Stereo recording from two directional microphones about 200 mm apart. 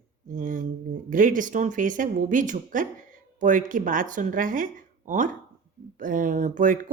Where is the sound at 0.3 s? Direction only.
40° right (ahead or behind).